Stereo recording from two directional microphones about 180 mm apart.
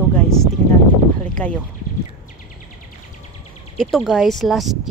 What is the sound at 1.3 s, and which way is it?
Speech, 5° left (ahead or behind).